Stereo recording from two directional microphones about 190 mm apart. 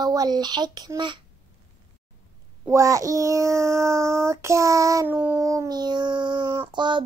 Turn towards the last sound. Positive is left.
turn(degrees=-25)  # may be behind; listen again after turning